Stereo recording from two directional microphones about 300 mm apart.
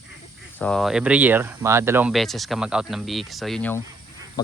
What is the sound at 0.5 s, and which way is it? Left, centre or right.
Speech, centre.